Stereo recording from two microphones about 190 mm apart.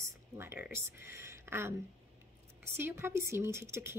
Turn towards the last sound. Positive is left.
turn(degrees=-15)  # may be behind; listen again after turning